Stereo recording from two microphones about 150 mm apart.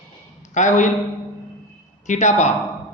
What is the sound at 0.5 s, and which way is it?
Speech, 55° left (ahead or behind).